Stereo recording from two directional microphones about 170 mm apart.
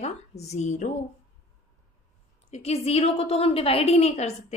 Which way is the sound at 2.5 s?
35° left (ahead or behind).